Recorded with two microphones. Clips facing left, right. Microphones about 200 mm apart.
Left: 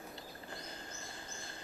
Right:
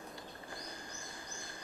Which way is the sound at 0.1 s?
15° right (ahead or behind).